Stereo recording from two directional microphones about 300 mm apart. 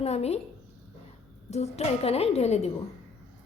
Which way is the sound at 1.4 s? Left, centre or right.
Left.